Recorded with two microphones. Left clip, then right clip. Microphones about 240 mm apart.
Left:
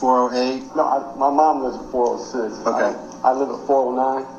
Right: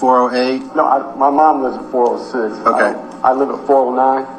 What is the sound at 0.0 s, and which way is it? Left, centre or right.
A man's voice, right.